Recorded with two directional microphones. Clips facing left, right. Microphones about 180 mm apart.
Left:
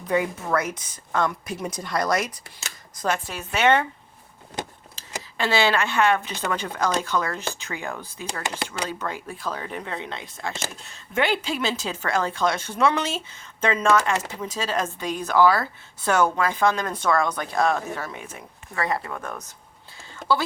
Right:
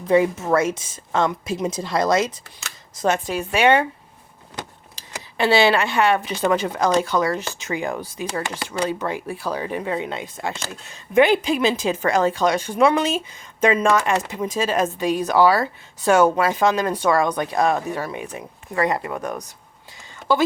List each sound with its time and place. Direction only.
0.1 s a woman's voice: 25° right (ahead or behind)
5.4 s speech: 15° right (ahead or behind)